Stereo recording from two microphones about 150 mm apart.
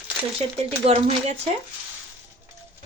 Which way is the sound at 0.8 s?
40° right (ahead or behind).